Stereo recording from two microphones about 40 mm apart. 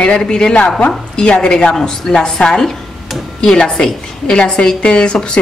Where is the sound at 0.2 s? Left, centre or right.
Centre.